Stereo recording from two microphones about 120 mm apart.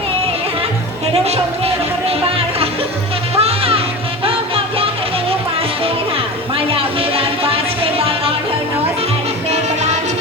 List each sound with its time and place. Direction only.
3.3 s music: 55° right (ahead or behind)
6.7 s music: 50° right (ahead or behind)